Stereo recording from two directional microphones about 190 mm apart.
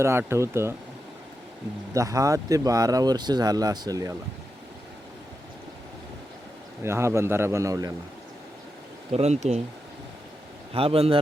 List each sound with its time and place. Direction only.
0.0 s a man's voice: 15° right (ahead or behind)
1.9 s speech: 15° right (ahead or behind)
6.8 s a man's voice: 15° right (ahead or behind)
9.1 s speech: 35° right (ahead or behind)
10.8 s speech: 30° right (ahead or behind)